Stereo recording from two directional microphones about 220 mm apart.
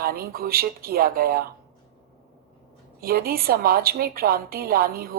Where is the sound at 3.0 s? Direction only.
45° right (ahead or behind).